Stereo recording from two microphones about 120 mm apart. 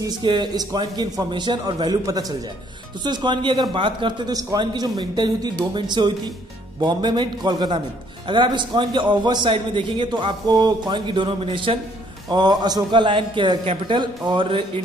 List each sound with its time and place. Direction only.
0.2 s a man's voice: 40° right (ahead or behind)
4.3 s a man's voice: 30° right (ahead or behind)